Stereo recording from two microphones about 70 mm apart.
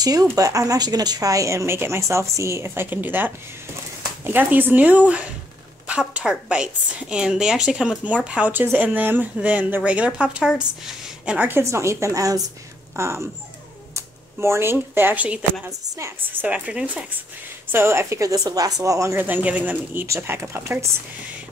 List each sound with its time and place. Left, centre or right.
0.0 s speech: right; by 5.3 s centre
5.9 s a sound: centre
6.2 s a woman's voice: centre
11.3 s speech: right
11.6 s speech: right
12.9 s speech: right
15.1 s a woman's voice: centre
17.6 s speech: right
19.1 s speech: right
20.2 s speech: right